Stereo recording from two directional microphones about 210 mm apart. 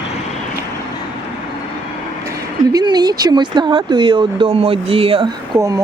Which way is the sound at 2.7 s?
20° right (ahead or behind).